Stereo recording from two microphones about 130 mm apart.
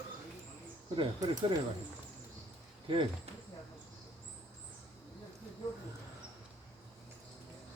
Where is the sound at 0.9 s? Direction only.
35° right (ahead or behind).